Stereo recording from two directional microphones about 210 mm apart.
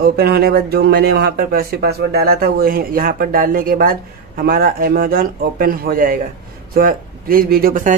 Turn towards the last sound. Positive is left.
turn(degrees=-40)  # may be behind; listen again after turning